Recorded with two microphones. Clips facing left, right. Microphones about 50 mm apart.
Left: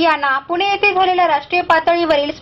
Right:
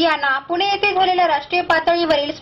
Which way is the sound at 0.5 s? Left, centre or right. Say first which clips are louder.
Left 2 dB; left.